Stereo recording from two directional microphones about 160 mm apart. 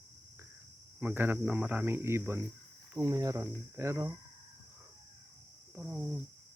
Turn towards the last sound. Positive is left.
turn(degrees=-5)  # may be behind; listen again after turning